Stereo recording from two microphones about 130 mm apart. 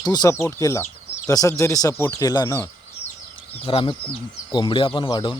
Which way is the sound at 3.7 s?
45° left (ahead or behind).